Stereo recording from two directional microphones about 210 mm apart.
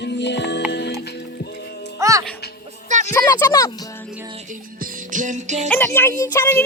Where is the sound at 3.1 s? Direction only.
10° left (ahead or behind).